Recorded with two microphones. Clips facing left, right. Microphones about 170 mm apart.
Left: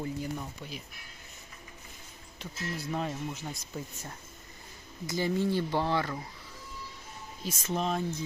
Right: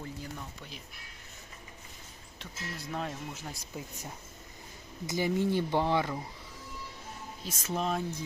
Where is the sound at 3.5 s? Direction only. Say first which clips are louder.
Left 2 dB; 10° right (ahead or behind).